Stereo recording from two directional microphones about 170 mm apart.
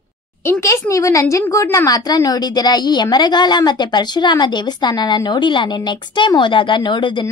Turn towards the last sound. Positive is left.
turn(degrees=25)  # may be behind; listen again after turning